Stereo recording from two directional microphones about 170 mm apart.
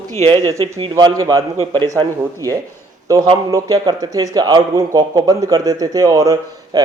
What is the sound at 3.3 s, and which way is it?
A man's voice, 25° right (ahead or behind).